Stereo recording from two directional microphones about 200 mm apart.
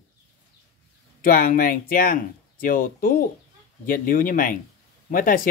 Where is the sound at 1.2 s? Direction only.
45° left (ahead or behind).